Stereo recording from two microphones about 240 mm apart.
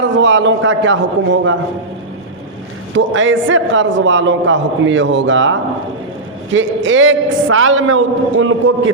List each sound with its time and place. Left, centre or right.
0.2 s a man's voice: right
2.9 s a man's voice: right